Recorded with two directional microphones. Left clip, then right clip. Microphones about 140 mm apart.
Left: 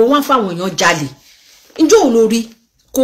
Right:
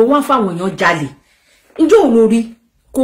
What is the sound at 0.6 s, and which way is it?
Speech, 15° right (ahead or behind).